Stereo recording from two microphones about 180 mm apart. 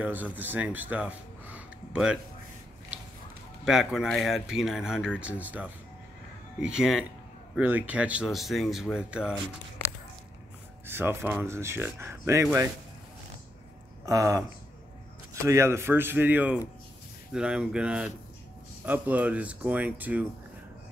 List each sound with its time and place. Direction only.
0.0 s speech: 10° right (ahead or behind)
3.6 s speech: centre (ahead or behind)
10.9 s speech: 10° right (ahead or behind)
14.0 s speech: 20° right (ahead or behind)
15.4 s speech: 15° right (ahead or behind)